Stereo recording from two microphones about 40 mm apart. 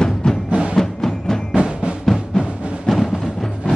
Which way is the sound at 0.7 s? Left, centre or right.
Centre.